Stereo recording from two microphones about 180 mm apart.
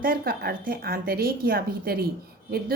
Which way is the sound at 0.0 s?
55° right (ahead or behind).